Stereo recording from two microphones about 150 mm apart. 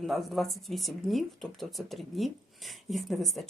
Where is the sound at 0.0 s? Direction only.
Centre (ahead or behind).